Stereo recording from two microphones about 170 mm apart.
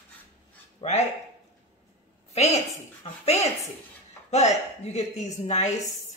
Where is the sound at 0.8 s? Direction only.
35° left (ahead or behind).